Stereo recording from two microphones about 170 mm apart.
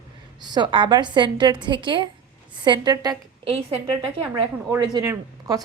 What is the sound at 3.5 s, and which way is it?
Speech, 35° right (ahead or behind).